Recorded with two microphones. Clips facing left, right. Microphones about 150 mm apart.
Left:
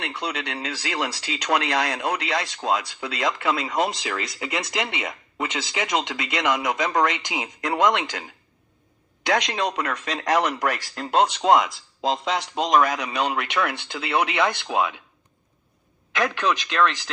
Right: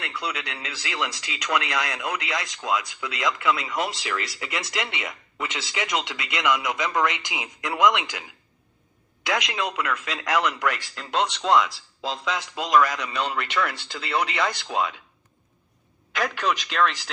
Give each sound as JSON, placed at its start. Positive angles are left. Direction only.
{"t": 0.0, "sound": "speech", "side_deg": 30}
{"t": 9.3, "sound": "speech", "side_deg": 35}
{"t": 12.6, "sound": "speech", "side_deg": 25}
{"t": 16.2, "sound": "speech", "side_deg": -5}